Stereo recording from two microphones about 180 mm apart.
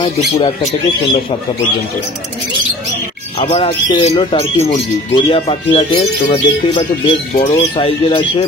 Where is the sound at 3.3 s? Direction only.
30° left (ahead or behind).